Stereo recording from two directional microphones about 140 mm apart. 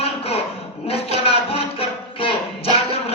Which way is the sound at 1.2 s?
45° left (ahead or behind).